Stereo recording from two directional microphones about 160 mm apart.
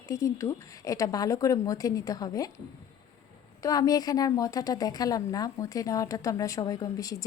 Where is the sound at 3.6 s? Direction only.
20° left (ahead or behind).